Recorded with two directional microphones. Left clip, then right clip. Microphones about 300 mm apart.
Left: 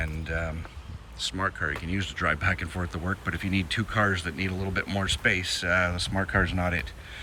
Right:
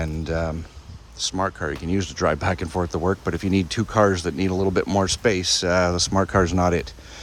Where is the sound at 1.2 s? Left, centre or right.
Centre.